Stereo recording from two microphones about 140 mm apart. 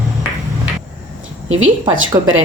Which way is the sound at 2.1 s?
25° right (ahead or behind).